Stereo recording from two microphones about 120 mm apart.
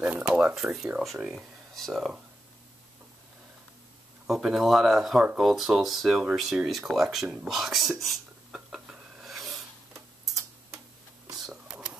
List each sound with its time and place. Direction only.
0.0 s speech: 10° right (ahead or behind)
4.3 s speech: 5° right (ahead or behind)
8.1 s a sound: 5° right (ahead or behind)
11.7 s whispering: 10° right (ahead or behind)